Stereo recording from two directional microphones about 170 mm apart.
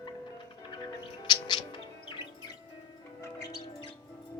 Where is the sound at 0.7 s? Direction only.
25° left (ahead or behind).